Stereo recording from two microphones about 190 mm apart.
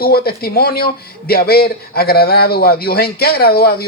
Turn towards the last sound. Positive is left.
turn(degrees=55)  # may be behind; listen again after turning